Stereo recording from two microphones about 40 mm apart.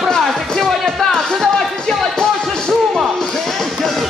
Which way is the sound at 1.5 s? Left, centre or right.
Centre.